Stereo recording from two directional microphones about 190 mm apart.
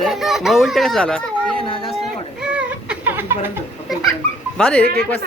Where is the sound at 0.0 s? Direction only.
Centre (ahead or behind).